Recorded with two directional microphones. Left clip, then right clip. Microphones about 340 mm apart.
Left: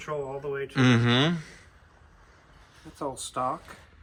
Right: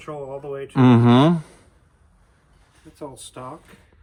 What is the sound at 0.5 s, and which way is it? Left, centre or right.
Speech, centre.